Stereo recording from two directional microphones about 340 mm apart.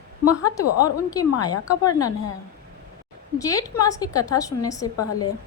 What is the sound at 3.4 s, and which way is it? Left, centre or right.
A woman's voice, centre.